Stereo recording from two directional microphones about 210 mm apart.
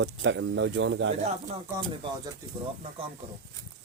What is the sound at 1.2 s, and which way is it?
Speech, 30° right (ahead or behind).